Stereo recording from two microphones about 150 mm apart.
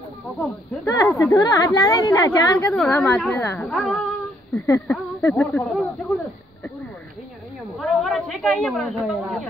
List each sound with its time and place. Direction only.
0.8 s a woman's voice: 20° left (ahead or behind)
2.7 s speech: 5° left (ahead or behind)
3.6 s speech: centre (ahead or behind)
4.6 s speech: 15° left (ahead or behind)
7.8 s a sound: centre (ahead or behind)